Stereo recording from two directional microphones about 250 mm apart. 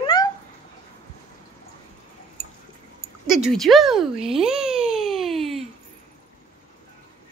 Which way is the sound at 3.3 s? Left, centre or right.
Centre.